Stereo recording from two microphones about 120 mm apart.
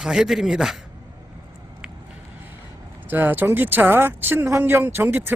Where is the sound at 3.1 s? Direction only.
15° right (ahead or behind).